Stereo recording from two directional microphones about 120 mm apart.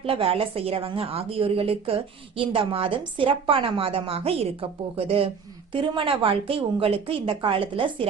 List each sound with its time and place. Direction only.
0.0 s a woman's voice: 50° right (ahead or behind)